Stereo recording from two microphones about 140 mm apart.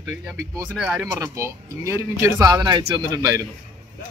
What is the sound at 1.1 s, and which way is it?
Speech, 25° right (ahead or behind).